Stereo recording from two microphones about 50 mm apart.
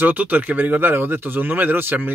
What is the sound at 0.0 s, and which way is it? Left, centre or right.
Speech, right.